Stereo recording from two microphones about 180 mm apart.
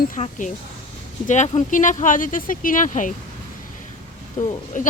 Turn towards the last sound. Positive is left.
turn(degrees=45)  # may be behind; listen again after turning